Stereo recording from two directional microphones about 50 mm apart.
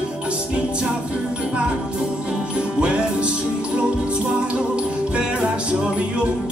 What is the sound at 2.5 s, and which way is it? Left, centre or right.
Music, right.